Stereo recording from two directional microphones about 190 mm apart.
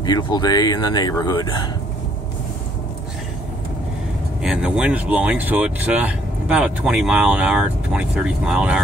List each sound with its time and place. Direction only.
0.0 s speech: 20° left (ahead or behind)
4.4 s speech: 5° right (ahead or behind)